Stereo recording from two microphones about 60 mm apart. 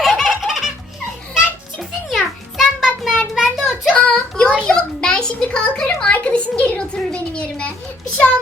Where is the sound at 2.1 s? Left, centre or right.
Centre.